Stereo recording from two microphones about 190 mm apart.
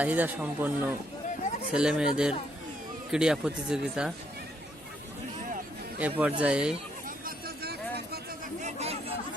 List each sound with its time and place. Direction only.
0.0 s speech: 10° right (ahead or behind)
6.0 s speech: 10° right (ahead or behind)
7.3 s vehicle: 55° right (ahead or behind)
8.6 s chatter: 35° right (ahead or behind)